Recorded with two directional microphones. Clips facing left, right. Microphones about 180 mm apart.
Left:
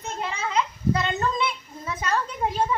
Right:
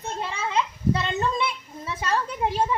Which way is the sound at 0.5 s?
25° right (ahead or behind).